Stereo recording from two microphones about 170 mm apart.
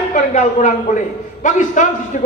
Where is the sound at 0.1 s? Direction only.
45° left (ahead or behind).